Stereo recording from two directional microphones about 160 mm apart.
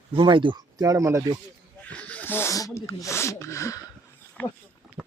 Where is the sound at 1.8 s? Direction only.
10° left (ahead or behind).